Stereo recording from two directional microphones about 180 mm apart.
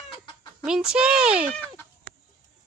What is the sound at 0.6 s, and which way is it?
Speech, 5° right (ahead or behind).